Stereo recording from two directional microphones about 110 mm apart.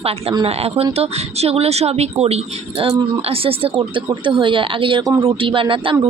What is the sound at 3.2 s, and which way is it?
A woman's voice, 60° right (ahead or behind).